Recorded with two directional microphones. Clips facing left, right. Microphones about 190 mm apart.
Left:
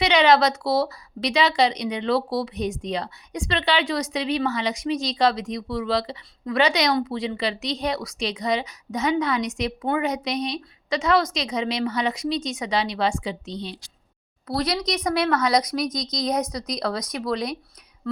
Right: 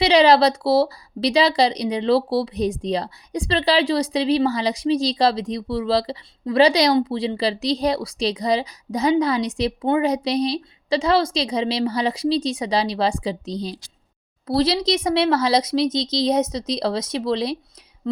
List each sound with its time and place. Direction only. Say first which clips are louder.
0.0 s speech: right 4 dB; 35° right (ahead or behind)